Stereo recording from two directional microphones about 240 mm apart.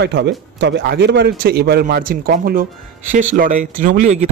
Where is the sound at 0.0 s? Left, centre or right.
Right.